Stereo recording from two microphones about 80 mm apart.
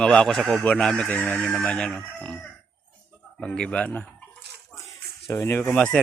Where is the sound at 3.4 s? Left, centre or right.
Centre.